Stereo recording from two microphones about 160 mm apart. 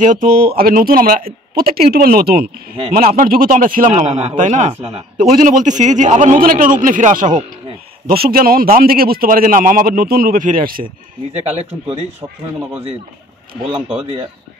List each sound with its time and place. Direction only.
0.0 s a man's voice: 55° right (ahead or behind)
8.1 s a man's voice: 70° right (ahead or behind)
11.3 s a man's voice: 40° right (ahead or behind)